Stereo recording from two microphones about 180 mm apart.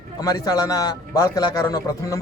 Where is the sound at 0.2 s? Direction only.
20° left (ahead or behind).